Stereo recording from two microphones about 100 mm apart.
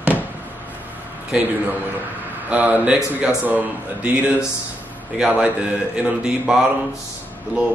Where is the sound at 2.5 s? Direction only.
15° right (ahead or behind).